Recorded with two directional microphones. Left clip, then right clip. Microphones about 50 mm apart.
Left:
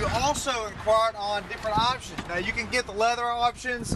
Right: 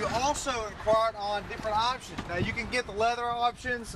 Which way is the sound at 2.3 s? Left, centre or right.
Left.